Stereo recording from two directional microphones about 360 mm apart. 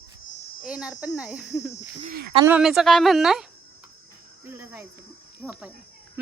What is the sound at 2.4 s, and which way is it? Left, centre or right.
A woman's voice, centre.